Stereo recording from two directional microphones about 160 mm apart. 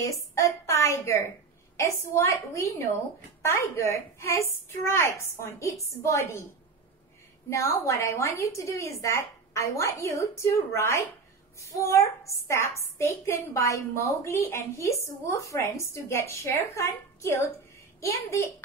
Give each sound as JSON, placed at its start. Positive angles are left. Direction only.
{"t": 0.0, "sound": "a woman's voice", "side_deg": 20}
{"t": 7.4, "sound": "a woman's voice", "side_deg": 20}